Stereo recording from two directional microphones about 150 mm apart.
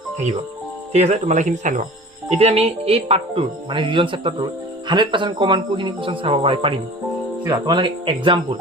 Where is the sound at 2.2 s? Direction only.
45° right (ahead or behind).